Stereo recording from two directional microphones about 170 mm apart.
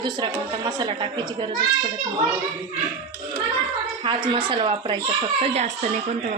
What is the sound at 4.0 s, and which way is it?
A child's voice, 30° right (ahead or behind).